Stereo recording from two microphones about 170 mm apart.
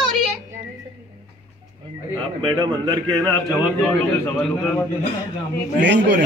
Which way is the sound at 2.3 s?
25° right (ahead or behind).